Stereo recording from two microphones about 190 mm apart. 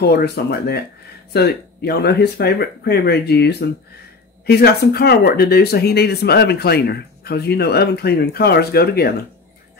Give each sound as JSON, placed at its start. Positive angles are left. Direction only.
{"t": 0.0, "sound": "speech", "side_deg": 55}